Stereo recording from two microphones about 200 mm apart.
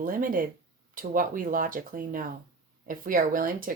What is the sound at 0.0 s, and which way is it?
Speech, 40° right (ahead or behind).